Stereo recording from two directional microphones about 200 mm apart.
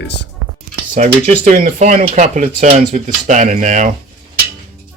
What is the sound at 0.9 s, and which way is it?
Speech, 35° right (ahead or behind).